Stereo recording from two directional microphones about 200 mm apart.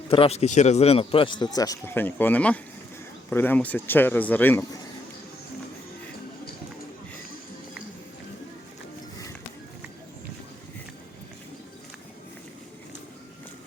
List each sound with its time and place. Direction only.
0.1 s a man's voice: 30° left (ahead or behind); by 4.8 s 10° left (ahead or behind)